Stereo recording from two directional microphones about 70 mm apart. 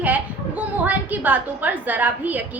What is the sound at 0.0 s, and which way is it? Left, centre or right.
A woman's voice, right.